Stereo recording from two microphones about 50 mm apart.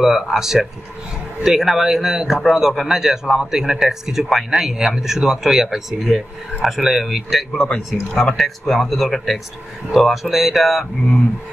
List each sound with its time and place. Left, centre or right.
0.0 s speech: centre
7.6 s speech: left
8.2 s speech: centre